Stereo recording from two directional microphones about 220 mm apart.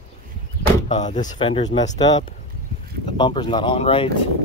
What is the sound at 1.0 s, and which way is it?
Speech, 35° left (ahead or behind).